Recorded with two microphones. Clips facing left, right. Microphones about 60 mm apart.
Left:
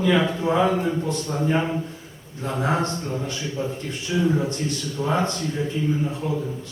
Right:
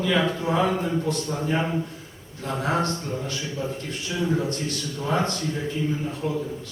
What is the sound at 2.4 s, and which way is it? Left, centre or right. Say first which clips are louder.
A man's voice: left 1 dB; centre.